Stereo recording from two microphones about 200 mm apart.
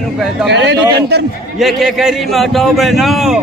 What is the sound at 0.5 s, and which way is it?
Speech, 60° right (ahead or behind).